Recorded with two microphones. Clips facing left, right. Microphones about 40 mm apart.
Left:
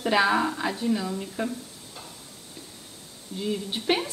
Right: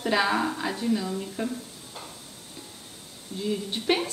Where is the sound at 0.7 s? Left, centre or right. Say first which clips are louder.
Even; centre.